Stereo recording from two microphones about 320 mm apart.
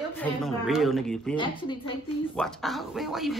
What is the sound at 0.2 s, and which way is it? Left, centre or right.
Speech, centre.